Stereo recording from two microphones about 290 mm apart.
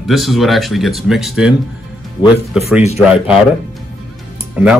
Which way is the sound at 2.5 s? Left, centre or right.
Centre.